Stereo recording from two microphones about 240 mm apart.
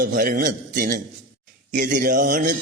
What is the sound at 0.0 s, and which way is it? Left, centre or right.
Mantra, right.